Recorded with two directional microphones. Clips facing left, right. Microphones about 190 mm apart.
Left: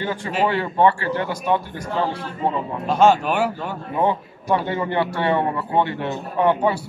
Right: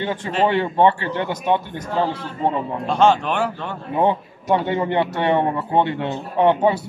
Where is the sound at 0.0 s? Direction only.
25° right (ahead or behind).